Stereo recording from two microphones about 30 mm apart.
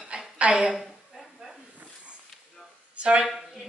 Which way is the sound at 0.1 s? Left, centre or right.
Right.